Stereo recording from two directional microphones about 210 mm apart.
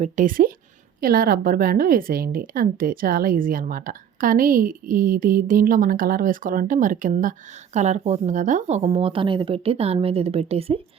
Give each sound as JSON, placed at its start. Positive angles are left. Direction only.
{"t": 0.0, "sound": "a woman's voice", "side_deg": -40}